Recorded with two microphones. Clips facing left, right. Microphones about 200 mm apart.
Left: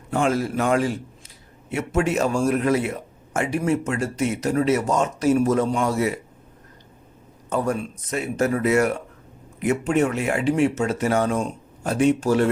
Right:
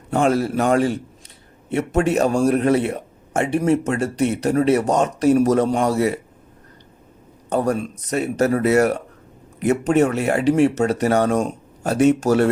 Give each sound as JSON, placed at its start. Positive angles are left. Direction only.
{"t": 0.1, "sound": "speech", "side_deg": -35}
{"t": 7.5, "sound": "speech", "side_deg": -35}